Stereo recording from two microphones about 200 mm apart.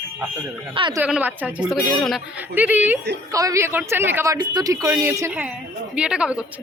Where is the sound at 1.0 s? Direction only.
10° right (ahead or behind).